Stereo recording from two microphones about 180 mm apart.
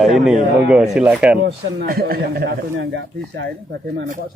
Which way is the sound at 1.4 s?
60° right (ahead or behind).